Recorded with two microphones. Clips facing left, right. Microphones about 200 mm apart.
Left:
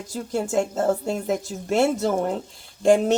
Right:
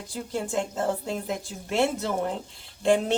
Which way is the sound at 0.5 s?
45° left (ahead or behind).